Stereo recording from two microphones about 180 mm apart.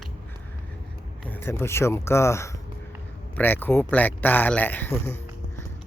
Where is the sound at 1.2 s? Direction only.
10° left (ahead or behind).